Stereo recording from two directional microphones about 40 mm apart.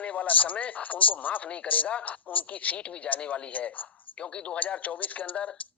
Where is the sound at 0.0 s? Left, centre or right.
Left.